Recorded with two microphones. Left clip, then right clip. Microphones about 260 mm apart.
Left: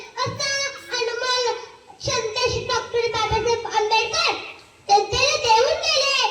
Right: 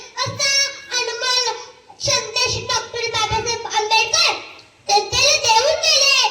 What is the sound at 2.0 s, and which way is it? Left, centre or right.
Child singing, right.